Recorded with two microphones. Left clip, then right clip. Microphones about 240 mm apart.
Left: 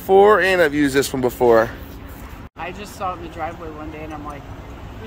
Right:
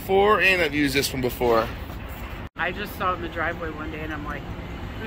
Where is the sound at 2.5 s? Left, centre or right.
Left.